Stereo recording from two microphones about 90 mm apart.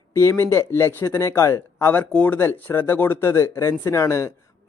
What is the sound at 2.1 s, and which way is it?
Speech, 15° left (ahead or behind).